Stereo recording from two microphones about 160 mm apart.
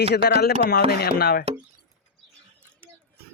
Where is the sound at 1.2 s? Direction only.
75° left (ahead or behind).